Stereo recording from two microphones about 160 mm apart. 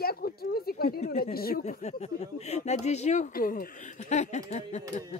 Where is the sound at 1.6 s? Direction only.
45° left (ahead or behind); by 3.7 s 65° left (ahead or behind).